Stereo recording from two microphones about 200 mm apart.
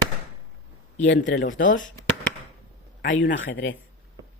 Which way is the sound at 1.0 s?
60° left (ahead or behind).